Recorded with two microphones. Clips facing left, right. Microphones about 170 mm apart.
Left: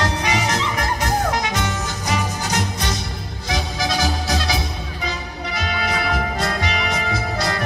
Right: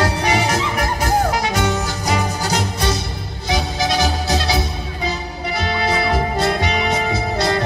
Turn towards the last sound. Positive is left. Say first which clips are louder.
# right 4 dB
turn(degrees=-30)  # may be behind; listen again after turning